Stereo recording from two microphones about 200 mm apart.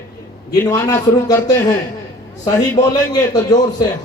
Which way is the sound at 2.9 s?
20° left (ahead or behind).